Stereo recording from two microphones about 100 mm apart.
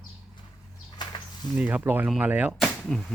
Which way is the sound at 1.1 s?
55° left (ahead or behind).